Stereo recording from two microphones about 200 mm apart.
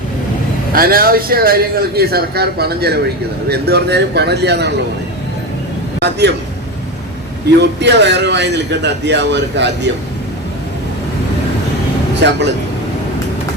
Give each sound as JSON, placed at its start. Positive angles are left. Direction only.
{"t": 0.7, "sound": "a man's voice", "side_deg": -45}
{"t": 6.0, "sound": "a man's voice", "side_deg": -55}
{"t": 7.6, "sound": "a man's voice", "side_deg": -60}